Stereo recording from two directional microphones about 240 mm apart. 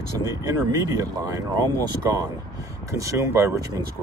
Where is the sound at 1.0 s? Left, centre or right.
Centre.